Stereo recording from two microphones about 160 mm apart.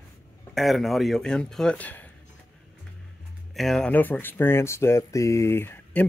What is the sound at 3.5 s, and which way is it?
Speech, centre (ahead or behind).